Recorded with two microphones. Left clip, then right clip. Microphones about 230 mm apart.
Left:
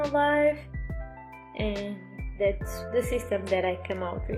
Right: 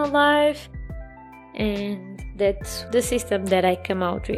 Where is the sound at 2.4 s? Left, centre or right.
Right.